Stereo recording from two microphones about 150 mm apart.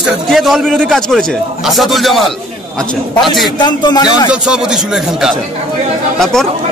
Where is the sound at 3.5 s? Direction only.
30° left (ahead or behind).